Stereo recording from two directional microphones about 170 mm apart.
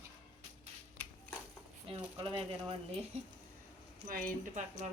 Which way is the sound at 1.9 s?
30° right (ahead or behind).